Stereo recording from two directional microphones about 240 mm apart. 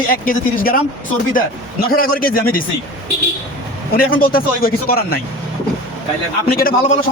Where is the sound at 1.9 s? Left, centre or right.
Left.